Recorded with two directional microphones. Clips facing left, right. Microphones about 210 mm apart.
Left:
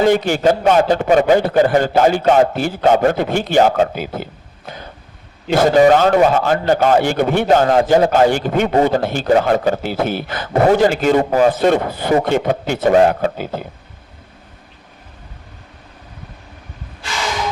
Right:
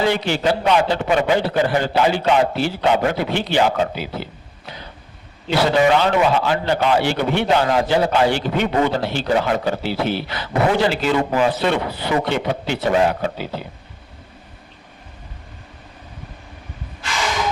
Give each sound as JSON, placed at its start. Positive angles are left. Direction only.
{"t": 0.0, "sound": "a man's voice", "side_deg": 45}